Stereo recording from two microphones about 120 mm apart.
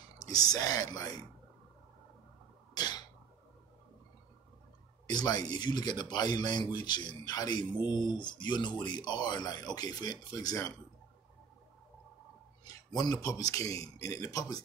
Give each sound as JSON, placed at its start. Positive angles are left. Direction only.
{"t": 0.2, "sound": "speech", "side_deg": 30}
{"t": 2.7, "sound": "a sound", "side_deg": 35}
{"t": 5.0, "sound": "speech", "side_deg": 35}
{"t": 12.6, "sound": "speech", "side_deg": 30}